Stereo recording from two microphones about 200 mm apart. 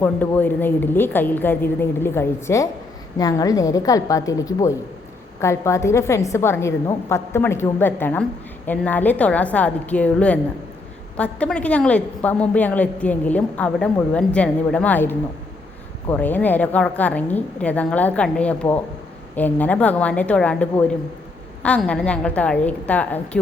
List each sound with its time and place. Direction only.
0.0 s a woman's voice: 10° left (ahead or behind)